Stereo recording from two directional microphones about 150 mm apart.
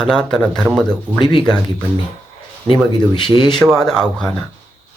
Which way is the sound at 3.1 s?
30° left (ahead or behind).